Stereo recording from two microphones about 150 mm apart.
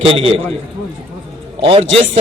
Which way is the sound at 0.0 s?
40° right (ahead or behind).